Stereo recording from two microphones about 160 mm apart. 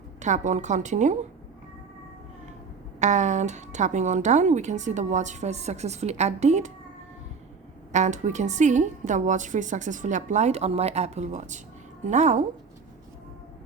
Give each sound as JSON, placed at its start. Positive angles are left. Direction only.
{"t": 0.2, "sound": "a woman's voice", "side_deg": -50}
{"t": 3.0, "sound": "a woman's voice", "side_deg": -45}
{"t": 7.9, "sound": "a woman's voice", "side_deg": -50}